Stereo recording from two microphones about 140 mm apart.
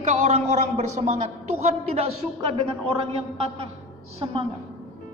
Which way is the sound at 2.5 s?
40° right (ahead or behind).